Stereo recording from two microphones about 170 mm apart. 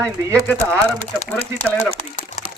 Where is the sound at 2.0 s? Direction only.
45° left (ahead or behind).